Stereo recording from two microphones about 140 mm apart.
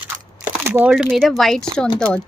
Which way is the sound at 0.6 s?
15° right (ahead or behind).